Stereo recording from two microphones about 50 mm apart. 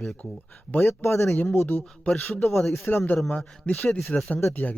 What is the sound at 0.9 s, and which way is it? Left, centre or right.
Speech, left.